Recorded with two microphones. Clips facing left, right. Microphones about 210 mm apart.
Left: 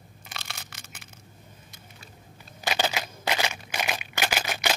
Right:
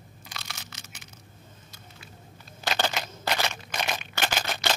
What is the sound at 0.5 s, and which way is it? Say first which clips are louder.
Crushing: even; 55° left (ahead or behind).